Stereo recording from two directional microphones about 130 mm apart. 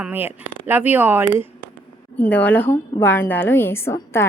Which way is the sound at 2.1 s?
10° left (ahead or behind).